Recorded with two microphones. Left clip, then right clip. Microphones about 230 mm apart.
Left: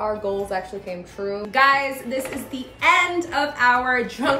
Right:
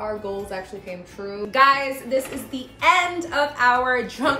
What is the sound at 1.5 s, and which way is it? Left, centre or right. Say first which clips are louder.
A woman's voice: right 1 dB; centre.